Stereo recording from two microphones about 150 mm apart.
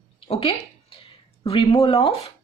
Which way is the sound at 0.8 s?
40° left (ahead or behind).